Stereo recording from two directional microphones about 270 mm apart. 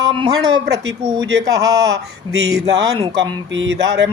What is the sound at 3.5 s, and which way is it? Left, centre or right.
Speech, right.